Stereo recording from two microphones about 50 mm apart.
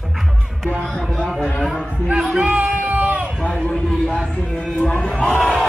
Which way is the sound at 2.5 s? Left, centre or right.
Right.